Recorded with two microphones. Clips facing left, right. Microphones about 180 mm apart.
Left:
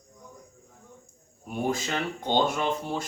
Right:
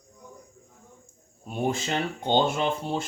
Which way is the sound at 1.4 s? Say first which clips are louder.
Right 1 dB; 25° right (ahead or behind).